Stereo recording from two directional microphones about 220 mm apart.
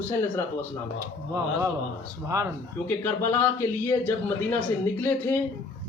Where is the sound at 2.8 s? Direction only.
10° left (ahead or behind).